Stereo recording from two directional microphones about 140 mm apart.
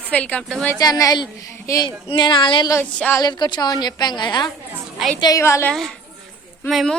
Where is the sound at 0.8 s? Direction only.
25° left (ahead or behind).